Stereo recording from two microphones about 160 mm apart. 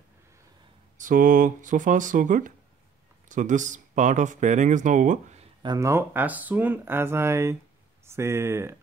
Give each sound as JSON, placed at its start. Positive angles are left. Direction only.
{"t": 0.9, "sound": "speech", "side_deg": -55}
{"t": 5.6, "sound": "speech", "side_deg": -25}